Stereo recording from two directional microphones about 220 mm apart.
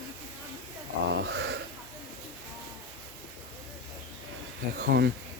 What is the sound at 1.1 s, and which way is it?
Speech, 55° right (ahead or behind).